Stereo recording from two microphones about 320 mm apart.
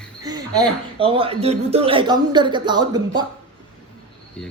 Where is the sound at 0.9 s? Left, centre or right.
Centre.